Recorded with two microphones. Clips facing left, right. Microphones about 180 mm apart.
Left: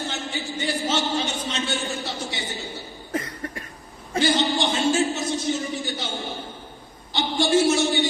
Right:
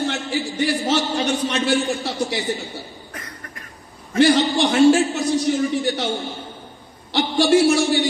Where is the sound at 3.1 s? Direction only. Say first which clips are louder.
Left 12 dB; 25° left (ahead or behind).